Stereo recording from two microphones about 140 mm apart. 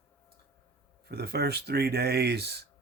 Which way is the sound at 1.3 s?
90° right.